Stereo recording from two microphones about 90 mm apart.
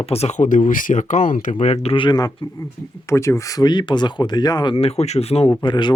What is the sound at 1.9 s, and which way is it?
Speech, 65° left (ahead or behind).